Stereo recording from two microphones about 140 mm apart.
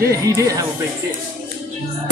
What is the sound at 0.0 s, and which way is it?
Speech, 20° right (ahead or behind).